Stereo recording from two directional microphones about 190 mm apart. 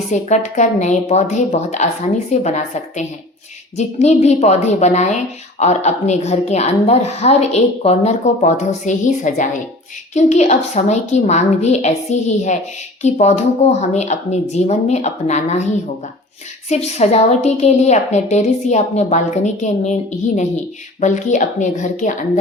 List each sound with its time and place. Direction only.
0.1 s a woman's voice: 40° left (ahead or behind)